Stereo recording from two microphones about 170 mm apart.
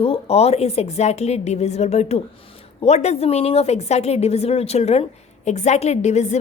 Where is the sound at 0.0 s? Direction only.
35° left (ahead or behind).